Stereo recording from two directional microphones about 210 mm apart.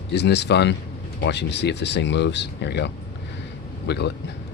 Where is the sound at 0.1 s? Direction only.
55° left (ahead or behind).